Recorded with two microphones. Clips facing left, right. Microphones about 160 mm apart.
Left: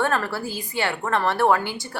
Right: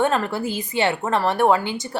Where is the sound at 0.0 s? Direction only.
20° right (ahead or behind).